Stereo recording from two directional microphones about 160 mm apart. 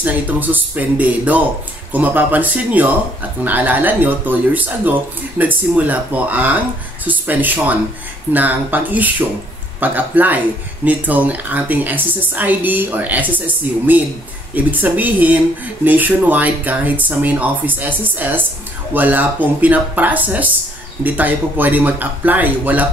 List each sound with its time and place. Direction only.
0.0 s speech: 10° right (ahead or behind)